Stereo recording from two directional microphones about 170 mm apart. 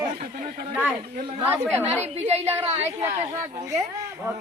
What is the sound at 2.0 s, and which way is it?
Speech, 40° right (ahead or behind).